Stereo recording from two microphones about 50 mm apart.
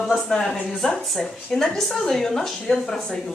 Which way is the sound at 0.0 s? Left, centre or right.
Centre.